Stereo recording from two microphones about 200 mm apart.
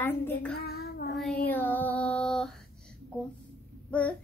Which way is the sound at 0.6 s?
50° left (ahead or behind).